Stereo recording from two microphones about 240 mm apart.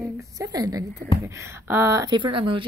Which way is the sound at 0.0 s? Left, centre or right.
Centre.